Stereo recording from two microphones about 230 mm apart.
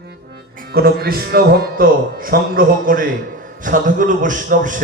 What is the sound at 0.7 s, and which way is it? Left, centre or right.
Speech, right.